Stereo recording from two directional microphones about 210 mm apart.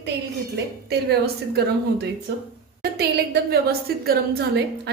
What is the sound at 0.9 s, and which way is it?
Speech, 50° right (ahead or behind).